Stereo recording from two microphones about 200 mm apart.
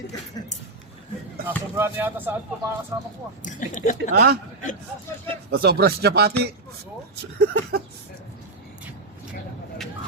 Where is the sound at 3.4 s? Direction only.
40° left (ahead or behind).